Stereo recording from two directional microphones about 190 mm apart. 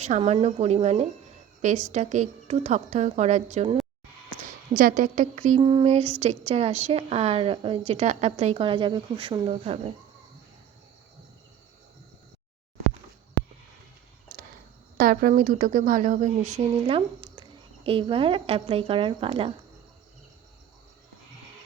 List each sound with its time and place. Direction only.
0.0 s a woman's voice: 35° right (ahead or behind)
4.8 s a woman's voice: 45° right (ahead or behind)
14.9 s a woman's voice: 50° right (ahead or behind); by 19.5 s 30° right (ahead or behind)